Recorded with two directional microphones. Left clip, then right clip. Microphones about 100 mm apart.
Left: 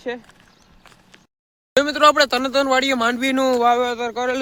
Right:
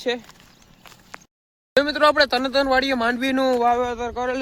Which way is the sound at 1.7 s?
5° left (ahead or behind).